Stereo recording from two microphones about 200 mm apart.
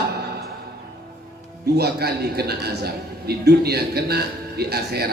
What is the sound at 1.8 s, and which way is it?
A man's voice, 50° right (ahead or behind).